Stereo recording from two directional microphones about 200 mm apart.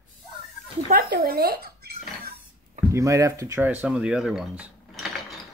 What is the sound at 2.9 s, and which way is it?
Speech, 15° right (ahead or behind).